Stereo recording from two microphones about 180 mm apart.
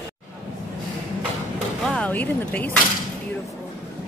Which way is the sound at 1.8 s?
10° left (ahead or behind).